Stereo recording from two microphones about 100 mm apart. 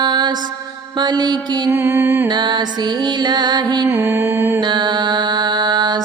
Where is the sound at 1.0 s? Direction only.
45° right (ahead or behind).